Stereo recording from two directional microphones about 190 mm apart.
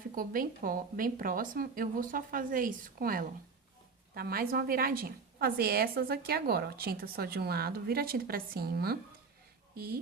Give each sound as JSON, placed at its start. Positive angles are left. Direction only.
{"t": 0.1, "sound": "a woman's voice", "side_deg": -50}